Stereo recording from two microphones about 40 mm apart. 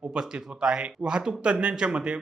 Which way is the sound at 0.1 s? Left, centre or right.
Right.